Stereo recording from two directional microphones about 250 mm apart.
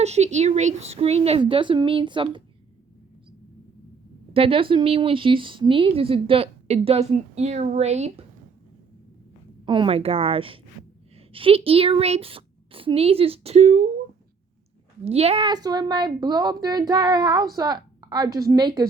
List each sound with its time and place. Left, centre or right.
0.0 s speech: right
4.4 s speech: right
9.6 s speech: centre
15.0 s a woman's voice: right